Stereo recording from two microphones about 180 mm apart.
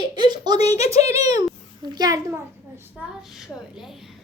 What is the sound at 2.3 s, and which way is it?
A child's voice, 10° right (ahead or behind).